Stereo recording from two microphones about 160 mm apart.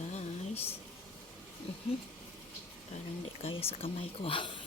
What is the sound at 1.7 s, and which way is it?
Speech, 40° left (ahead or behind).